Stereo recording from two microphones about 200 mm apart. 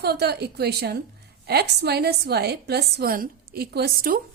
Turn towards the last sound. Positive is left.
turn(degrees=-50)  # may be behind; listen again after turning